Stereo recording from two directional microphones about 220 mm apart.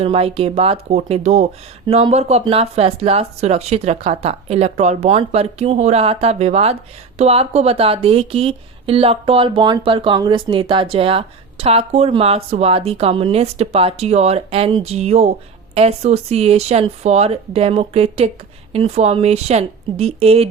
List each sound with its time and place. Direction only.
0.0 s speech: 25° right (ahead or behind)